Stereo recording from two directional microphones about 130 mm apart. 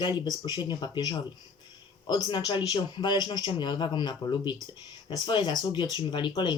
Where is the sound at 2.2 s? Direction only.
35° left (ahead or behind).